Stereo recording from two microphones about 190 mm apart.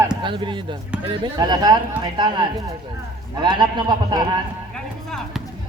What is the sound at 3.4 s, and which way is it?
A man's voice, 25° right (ahead or behind).